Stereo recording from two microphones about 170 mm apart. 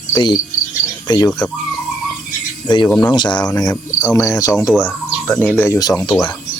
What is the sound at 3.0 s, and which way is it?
Cricket, 25° left (ahead or behind).